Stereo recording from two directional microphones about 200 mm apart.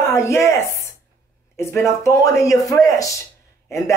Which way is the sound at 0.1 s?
15° left (ahead or behind).